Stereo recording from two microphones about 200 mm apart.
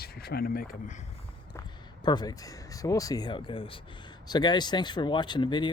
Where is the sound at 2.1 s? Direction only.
20° left (ahead or behind).